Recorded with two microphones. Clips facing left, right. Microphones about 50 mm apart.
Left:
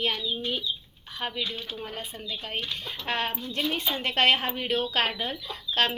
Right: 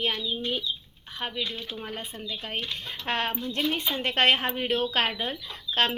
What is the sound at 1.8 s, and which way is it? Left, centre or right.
A woman's voice, right.